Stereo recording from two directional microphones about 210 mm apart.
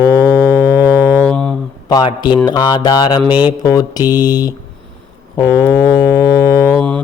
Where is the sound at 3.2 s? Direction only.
10° right (ahead or behind).